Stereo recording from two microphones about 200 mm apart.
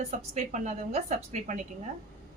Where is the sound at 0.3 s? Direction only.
35° right (ahead or behind).